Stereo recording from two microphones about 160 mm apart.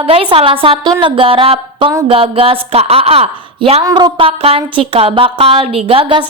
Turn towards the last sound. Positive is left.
turn(degrees=-35)  # may be behind; listen again after turning